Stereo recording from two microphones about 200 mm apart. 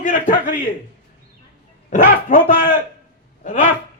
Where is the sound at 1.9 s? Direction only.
40° left (ahead or behind).